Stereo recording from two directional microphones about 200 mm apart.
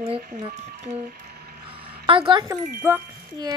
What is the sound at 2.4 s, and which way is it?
Speech, 10° right (ahead or behind).